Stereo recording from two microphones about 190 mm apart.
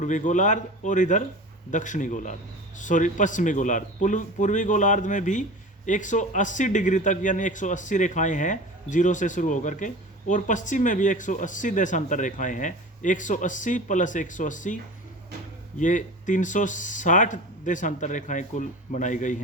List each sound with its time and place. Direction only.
0.0 s speech: 40° left (ahead or behind)
15.8 s speech: 40° left (ahead or behind)